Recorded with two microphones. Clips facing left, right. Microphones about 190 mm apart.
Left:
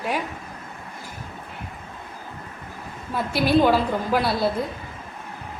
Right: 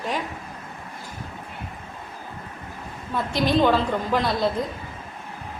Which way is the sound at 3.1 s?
10° left (ahead or behind).